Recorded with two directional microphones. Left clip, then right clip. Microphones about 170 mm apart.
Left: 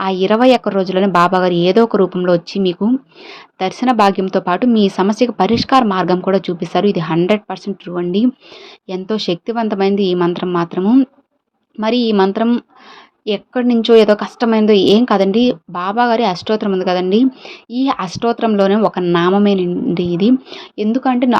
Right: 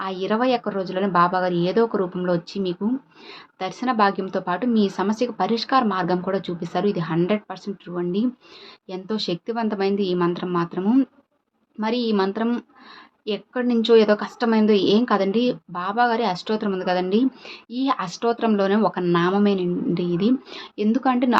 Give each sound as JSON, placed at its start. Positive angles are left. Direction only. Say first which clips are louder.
{"t": 0.0, "sound": "a woman's voice", "louder": "left 10 dB", "side_deg": 40}
{"t": 10.8, "sound": "speech", "louder": "left 8 dB", "side_deg": 25}
{"t": 11.8, "sound": "a woman's voice", "louder": "left 8 dB", "side_deg": 40}